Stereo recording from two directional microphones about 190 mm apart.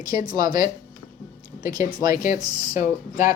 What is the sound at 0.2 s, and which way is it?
Speech, 25° right (ahead or behind).